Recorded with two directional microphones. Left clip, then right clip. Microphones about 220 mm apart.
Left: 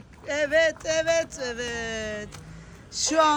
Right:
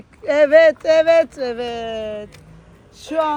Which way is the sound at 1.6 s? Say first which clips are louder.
Right 6 dB; 5° right (ahead or behind).